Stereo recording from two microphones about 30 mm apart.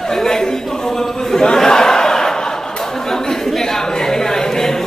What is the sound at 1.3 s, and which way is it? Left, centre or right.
Battle cry, left.